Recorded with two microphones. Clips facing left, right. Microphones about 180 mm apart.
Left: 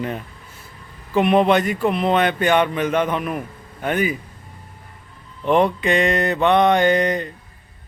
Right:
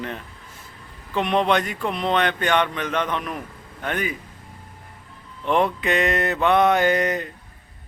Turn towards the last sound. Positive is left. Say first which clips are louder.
# left 3 dB
turn(degrees=-5)  # may be behind; listen again after turning